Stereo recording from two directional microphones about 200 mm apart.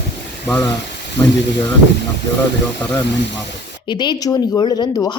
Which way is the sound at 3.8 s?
25° left (ahead or behind).